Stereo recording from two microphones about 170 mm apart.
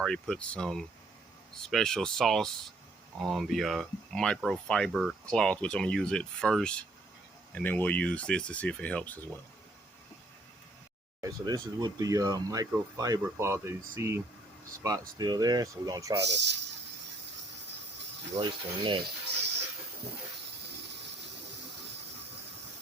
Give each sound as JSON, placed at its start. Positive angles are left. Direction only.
{"t": 0.0, "sound": "speech", "side_deg": 5}
{"t": 11.2, "sound": "speech", "side_deg": -20}
{"t": 15.2, "sound": "speech", "side_deg": -25}
{"t": 16.3, "sound": "speech", "side_deg": -90}
{"t": 18.3, "sound": "speech", "side_deg": -30}